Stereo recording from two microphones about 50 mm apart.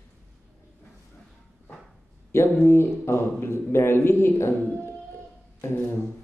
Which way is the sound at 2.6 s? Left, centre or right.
Left.